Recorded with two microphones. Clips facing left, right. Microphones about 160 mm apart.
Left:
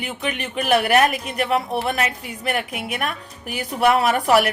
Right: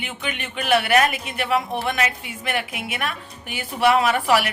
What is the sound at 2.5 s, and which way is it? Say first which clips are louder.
Speech: left 1 dB; centre (ahead or behind).